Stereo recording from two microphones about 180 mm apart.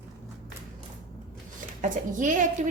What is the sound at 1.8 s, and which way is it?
Speech, 45° right (ahead or behind).